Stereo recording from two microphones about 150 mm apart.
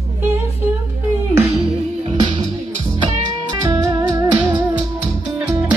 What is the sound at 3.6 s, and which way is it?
Music, 25° right (ahead or behind).